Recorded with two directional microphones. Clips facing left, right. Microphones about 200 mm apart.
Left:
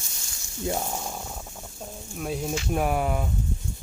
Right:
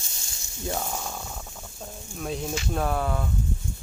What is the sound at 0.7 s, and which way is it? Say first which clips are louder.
Speech: left 1 dB; 15° left (ahead or behind).